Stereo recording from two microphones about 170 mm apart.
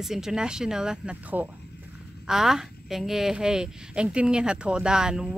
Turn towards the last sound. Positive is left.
turn(degrees=-5)  # may be behind; listen again after turning